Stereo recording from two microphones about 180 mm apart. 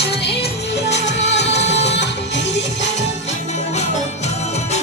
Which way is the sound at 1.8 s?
70° left (ahead or behind).